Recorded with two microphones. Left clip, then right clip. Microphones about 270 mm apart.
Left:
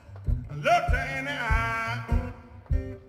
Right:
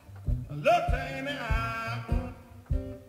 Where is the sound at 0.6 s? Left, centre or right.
Left.